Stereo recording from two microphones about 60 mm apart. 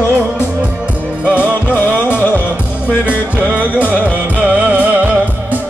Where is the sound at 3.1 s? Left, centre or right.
Right.